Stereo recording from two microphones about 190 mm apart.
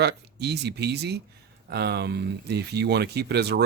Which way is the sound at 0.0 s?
60° right (ahead or behind).